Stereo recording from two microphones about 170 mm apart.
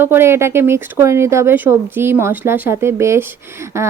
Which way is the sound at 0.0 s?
15° right (ahead or behind).